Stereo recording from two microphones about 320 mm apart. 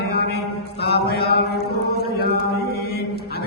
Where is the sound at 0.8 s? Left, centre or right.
Left.